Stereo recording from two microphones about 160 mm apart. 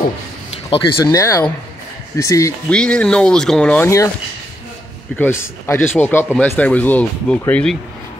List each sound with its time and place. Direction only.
0.7 s speech: 30° left (ahead or behind)
2.7 s speech: 5° left (ahead or behind)
5.1 s speech: 15° left (ahead or behind)